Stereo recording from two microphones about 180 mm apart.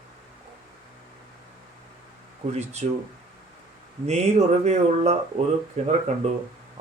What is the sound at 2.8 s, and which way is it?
Speech, 40° right (ahead or behind).